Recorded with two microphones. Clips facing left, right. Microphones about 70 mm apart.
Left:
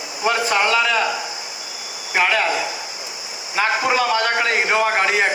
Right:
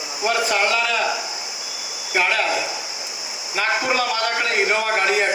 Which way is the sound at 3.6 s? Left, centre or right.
Left.